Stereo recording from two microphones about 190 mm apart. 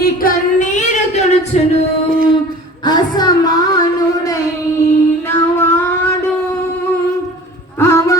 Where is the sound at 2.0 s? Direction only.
50° right (ahead or behind).